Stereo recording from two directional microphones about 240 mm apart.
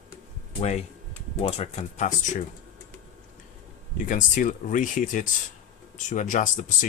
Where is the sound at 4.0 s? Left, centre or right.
Left.